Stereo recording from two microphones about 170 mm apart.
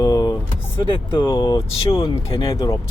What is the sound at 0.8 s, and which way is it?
Speech, 30° left (ahead or behind).